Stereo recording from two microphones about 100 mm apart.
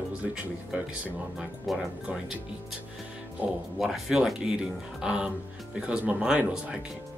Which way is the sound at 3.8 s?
5° right (ahead or behind).